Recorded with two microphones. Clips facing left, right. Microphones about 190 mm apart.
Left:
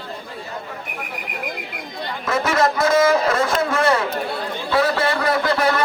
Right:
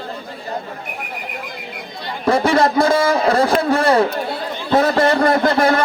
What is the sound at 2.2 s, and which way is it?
A man's voice, 30° right (ahead or behind).